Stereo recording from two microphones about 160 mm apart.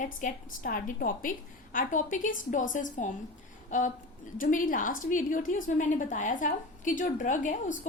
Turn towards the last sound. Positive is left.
turn(degrees=50)  # may be behind; listen again after turning